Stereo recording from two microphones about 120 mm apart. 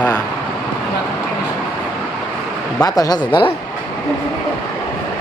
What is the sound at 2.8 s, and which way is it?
Speech, 30° left (ahead or behind).